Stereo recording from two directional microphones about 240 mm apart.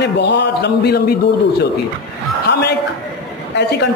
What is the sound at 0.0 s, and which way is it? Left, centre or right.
A man's voice, left.